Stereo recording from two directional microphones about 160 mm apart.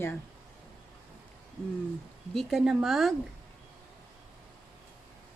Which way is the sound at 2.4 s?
Centre (ahead or behind).